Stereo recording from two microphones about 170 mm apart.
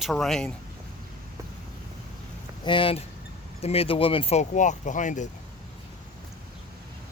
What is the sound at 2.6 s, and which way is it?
Speech, 30° left (ahead or behind).